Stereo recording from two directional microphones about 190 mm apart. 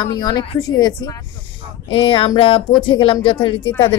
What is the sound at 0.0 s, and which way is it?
Speech, 20° left (ahead or behind).